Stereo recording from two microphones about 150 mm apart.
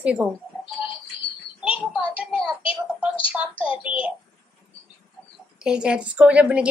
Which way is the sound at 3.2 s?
10° right (ahead or behind).